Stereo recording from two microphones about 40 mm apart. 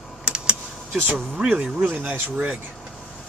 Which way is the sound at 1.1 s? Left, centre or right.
Right.